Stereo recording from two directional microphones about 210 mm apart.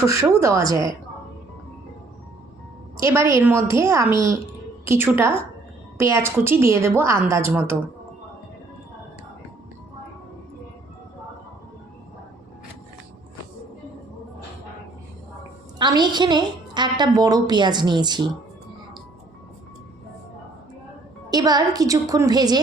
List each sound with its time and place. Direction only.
0.2 s a woman's voice: 15° right (ahead or behind)
3.0 s a woman's voice: 15° right (ahead or behind)
15.8 s a woman's voice: 20° right (ahead or behind)
21.2 s a woman's voice: 20° right (ahead or behind)